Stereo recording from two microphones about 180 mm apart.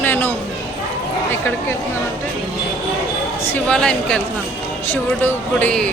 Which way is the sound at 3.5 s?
5° left (ahead or behind).